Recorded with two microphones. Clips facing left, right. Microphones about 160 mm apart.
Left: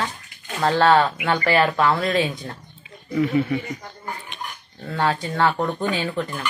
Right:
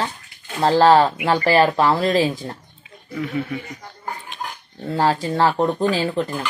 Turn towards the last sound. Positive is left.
turn(degrees=-30)  # may be behind; listen again after turning